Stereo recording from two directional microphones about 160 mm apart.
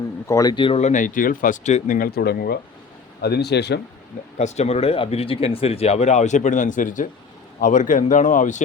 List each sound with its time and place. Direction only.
0.3 s speech: 20° left (ahead or behind)
0.8 s speech: 50° left (ahead or behind); by 3.8 s 90° left
4.4 s speech: 45° left (ahead or behind)